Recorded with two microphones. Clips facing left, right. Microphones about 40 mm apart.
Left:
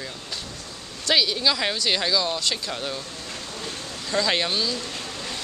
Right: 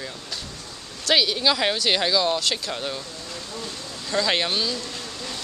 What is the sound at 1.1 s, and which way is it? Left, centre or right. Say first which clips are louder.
Speech: right 1 dB; centre.